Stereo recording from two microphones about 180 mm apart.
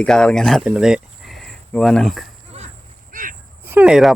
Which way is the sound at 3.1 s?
45° right (ahead or behind).